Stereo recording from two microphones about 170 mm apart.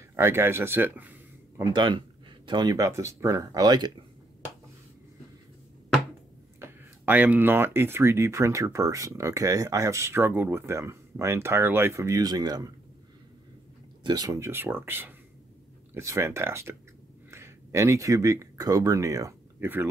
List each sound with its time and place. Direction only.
0.1 s speech: 15° right (ahead or behind)
1.6 s speech: 25° right (ahead or behind)
6.6 s speech: 10° right (ahead or behind)
14.0 s speech: 25° right (ahead or behind)